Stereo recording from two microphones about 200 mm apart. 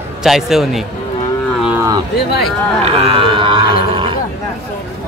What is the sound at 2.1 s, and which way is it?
Speech, 50° left (ahead or behind).